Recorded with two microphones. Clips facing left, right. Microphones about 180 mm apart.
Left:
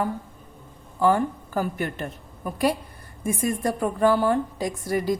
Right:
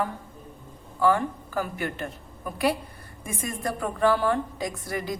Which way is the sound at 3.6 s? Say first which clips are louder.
Left 2 dB; 40° left (ahead or behind).